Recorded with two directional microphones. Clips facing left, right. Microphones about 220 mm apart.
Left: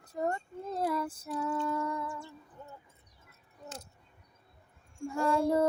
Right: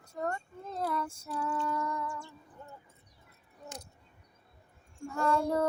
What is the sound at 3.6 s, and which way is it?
Keys jangling, 15° right (ahead or behind).